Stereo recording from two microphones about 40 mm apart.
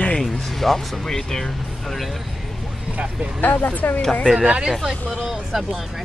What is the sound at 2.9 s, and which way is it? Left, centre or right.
Speech, right.